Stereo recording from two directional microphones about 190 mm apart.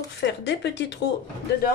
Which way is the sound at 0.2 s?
65° left (ahead or behind).